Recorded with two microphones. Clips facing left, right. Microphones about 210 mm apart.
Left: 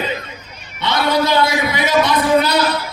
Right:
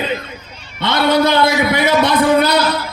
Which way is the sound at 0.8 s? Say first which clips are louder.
Right 3 dB; 55° right (ahead or behind).